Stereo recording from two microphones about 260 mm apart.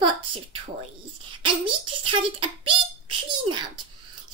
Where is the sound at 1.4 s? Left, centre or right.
Centre.